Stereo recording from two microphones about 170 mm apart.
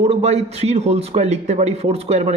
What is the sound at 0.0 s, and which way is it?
A man's voice, 40° right (ahead or behind).